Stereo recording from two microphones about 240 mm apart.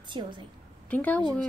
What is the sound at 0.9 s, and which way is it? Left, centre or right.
Speech, centre.